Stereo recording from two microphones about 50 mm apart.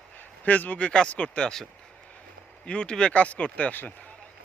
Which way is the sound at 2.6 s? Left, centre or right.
Centre.